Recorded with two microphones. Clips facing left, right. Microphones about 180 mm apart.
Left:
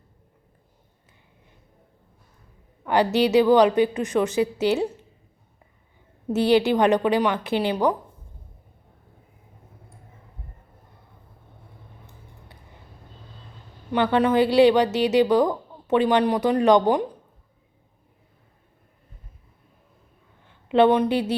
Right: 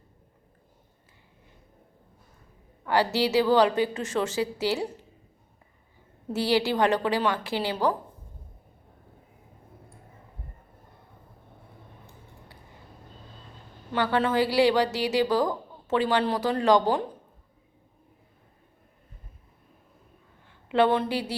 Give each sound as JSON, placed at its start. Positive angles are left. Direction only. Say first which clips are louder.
{"t": 2.8, "sound": "a woman's voice", "louder": "left 4 dB", "side_deg": 20}
{"t": 6.3, "sound": "a woman's voice", "louder": "left 6 dB", "side_deg": 20}
{"t": 13.9, "sound": "a woman's voice", "louder": "left 5 dB", "side_deg": 20}
{"t": 20.7, "sound": "a woman's voice", "louder": "left 5 dB", "side_deg": 20}